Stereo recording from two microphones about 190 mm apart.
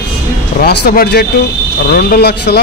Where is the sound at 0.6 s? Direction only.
55° left (ahead or behind).